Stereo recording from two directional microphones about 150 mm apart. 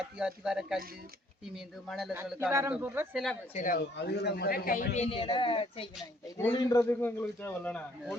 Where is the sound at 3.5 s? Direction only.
65° left (ahead or behind).